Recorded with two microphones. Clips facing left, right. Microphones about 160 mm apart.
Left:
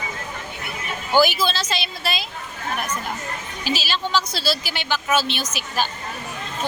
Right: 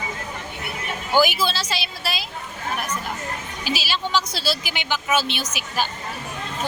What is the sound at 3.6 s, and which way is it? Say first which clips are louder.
Speech: left 1 dB; 10° right (ahead or behind).